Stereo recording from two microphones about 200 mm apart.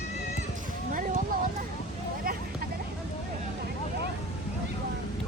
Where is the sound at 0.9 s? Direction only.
40° right (ahead or behind).